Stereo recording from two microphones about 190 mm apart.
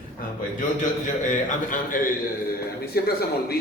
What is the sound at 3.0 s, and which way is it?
Speech, 55° left (ahead or behind).